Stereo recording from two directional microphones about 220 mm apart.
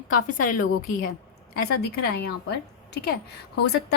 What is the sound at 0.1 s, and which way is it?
A woman's voice, 40° left (ahead or behind).